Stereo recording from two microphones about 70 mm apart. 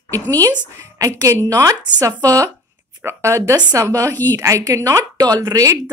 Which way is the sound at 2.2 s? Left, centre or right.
Right.